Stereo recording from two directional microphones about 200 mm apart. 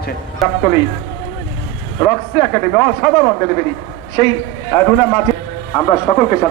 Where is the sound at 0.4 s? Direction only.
Centre (ahead or behind).